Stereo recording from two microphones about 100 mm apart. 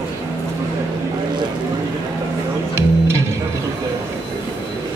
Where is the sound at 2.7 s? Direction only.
30° right (ahead or behind).